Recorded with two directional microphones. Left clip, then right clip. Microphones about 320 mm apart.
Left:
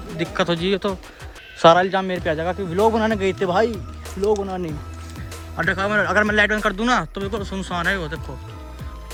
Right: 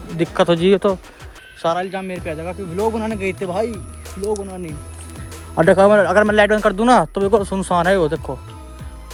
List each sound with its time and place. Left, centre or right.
0.1 s speech: centre
1.8 s speech: centre
2.7 s speech: left
3.0 s speech: centre
4.3 s speech: left
5.6 s speech: centre